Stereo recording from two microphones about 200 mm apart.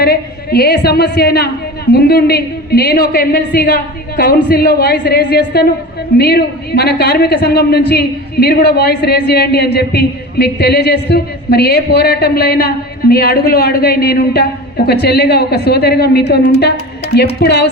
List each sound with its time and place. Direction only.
0.0 s a man's voice: 50° left (ahead or behind)
17.4 s speech: 55° left (ahead or behind)